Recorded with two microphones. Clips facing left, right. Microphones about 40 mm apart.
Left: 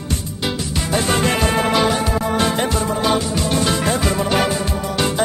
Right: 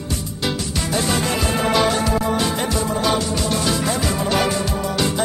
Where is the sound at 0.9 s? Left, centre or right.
Left.